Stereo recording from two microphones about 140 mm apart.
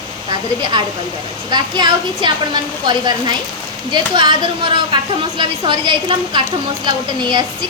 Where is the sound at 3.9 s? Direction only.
35° right (ahead or behind).